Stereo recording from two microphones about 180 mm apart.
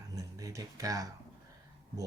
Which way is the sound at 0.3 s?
20° right (ahead or behind).